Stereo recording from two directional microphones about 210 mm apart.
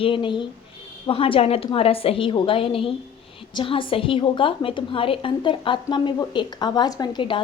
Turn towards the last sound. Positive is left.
turn(degrees=20)  # may be behind; listen again after turning